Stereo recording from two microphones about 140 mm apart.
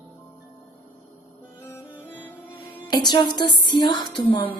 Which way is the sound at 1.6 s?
20° left (ahead or behind).